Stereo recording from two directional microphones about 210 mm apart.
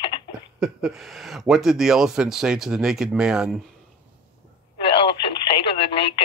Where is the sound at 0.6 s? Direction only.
Centre (ahead or behind).